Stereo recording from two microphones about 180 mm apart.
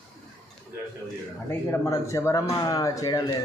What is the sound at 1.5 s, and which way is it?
Speech, 15° left (ahead or behind).